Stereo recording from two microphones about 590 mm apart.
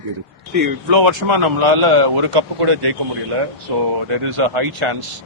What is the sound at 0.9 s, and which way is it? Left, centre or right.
A man's voice, right.